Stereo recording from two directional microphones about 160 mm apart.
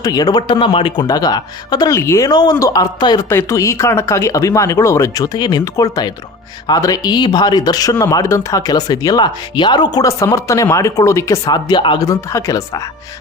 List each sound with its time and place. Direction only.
0.0 s speech: 25° left (ahead or behind)